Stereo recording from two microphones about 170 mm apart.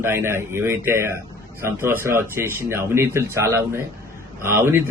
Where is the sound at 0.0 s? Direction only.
15° right (ahead or behind).